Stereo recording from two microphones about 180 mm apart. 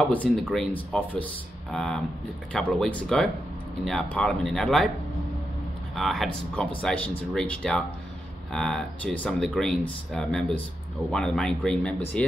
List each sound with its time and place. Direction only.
0.3 s speech: centre (ahead or behind)
5.9 s speech: centre (ahead or behind)